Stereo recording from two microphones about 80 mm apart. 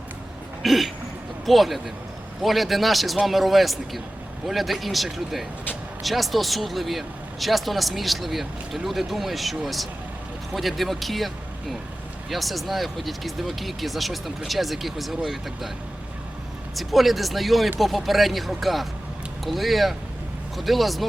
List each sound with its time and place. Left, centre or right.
0.6 s throat clearing: centre
1.5 s a man's voice: centre
12.3 s a man's voice: centre
16.7 s a man's voice: centre